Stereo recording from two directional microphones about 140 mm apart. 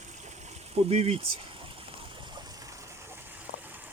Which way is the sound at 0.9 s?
50° right (ahead or behind).